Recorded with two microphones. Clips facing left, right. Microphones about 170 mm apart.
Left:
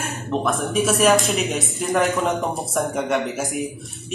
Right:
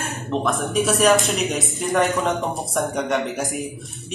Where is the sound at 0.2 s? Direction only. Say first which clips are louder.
Even; centre (ahead or behind).